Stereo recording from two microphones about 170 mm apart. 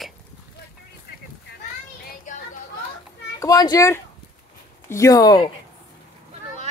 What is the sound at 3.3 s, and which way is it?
A child's voice, 20° left (ahead or behind).